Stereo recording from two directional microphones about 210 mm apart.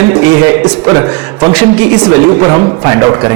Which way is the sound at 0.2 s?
10° right (ahead or behind).